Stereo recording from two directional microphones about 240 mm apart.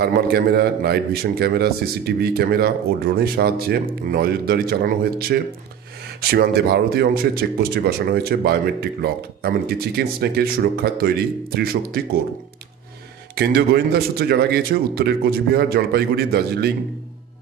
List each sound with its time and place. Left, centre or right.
0.0 s speech: right
13.3 s speech: right